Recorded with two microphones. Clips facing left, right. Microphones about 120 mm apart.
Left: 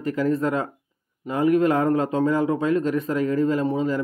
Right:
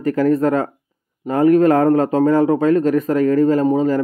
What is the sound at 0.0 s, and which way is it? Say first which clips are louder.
Speech: right 7 dB; 45° right (ahead or behind).